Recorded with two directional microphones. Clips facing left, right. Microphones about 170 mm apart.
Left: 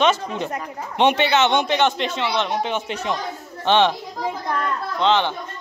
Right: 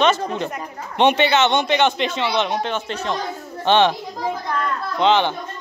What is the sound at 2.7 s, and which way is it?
Speech, 10° left (ahead or behind).